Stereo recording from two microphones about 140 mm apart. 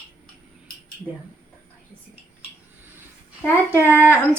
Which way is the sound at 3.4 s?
15° left (ahead or behind).